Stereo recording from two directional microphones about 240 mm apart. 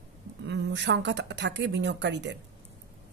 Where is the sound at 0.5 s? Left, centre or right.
Right.